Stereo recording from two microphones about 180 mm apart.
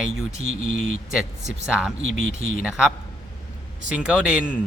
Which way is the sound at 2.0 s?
50° left (ahead or behind).